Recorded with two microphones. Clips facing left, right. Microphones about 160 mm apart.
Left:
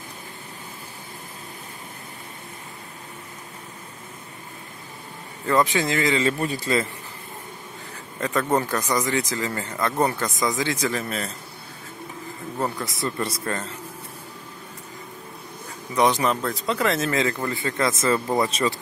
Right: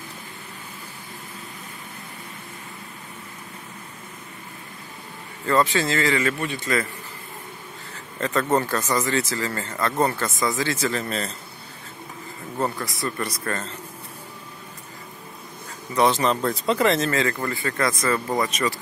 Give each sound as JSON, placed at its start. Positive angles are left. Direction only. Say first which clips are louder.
{"t": 5.5, "sound": "speech", "louder": "even", "side_deg": 15}
{"t": 6.4, "sound": "a man's voice", "louder": "left 2 dB", "side_deg": 35}
{"t": 8.2, "sound": "speech", "louder": "right 1 dB", "side_deg": 10}
{"t": 13.0, "sound": "speech", "louder": "left 1 dB", "side_deg": 25}
{"t": 15.9, "sound": "speech", "louder": "even", "side_deg": 15}
{"t": 16.3, "sound": "speech", "louder": "right 3 dB", "side_deg": 0}
{"t": 17.1, "sound": "speech", "louder": "even", "side_deg": 15}